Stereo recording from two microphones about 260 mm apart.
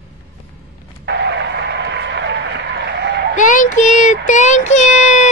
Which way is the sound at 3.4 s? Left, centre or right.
Left.